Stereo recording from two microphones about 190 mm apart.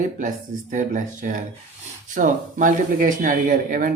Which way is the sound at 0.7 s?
40° right (ahead or behind).